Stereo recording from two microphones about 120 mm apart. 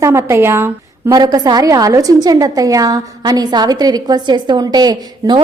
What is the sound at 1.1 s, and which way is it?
A woman's voice, 35° right (ahead or behind).